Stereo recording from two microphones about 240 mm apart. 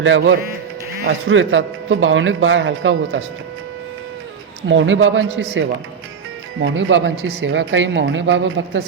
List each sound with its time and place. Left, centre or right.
0.0 s speech: right
4.7 s speech: right